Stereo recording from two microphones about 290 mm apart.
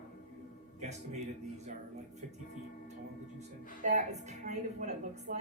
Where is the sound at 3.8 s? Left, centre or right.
Right.